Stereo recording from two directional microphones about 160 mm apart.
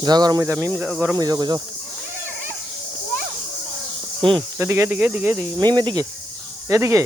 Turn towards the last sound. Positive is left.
turn(degrees=-15)  # may be behind; listen again after turning